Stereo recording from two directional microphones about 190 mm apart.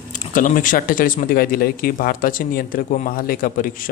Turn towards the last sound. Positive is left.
turn(degrees=45)  # may be behind; listen again after turning